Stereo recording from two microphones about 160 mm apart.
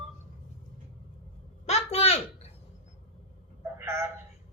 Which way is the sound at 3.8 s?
15° right (ahead or behind).